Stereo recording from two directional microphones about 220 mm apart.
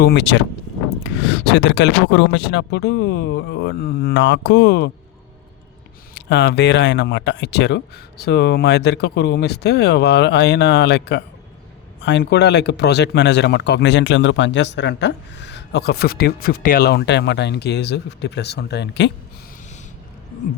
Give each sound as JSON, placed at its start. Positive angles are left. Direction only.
{"t": 0.0, "sound": "speech", "side_deg": 50}
{"t": 6.1, "sound": "speech", "side_deg": 50}